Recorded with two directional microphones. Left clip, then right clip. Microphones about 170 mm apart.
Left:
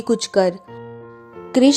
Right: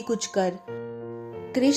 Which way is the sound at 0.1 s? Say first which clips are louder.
Left 8 dB; 50° left (ahead or behind).